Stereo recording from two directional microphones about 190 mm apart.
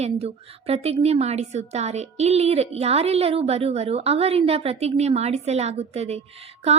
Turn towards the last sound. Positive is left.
turn(degrees=-35)  # may be behind; listen again after turning